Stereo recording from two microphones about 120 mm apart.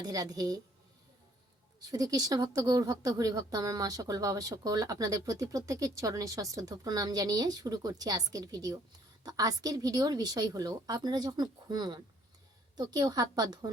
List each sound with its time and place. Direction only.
0.0 s speech: 30° right (ahead or behind)
1.9 s speech: 30° right (ahead or behind)